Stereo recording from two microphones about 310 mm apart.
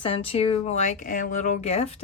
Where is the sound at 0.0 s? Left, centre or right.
Centre.